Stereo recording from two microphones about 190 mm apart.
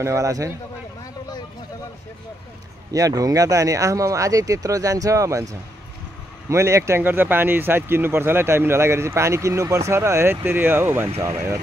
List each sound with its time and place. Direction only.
0.0 s speech: 15° right (ahead or behind)
2.9 s speech: 20° right (ahead or behind)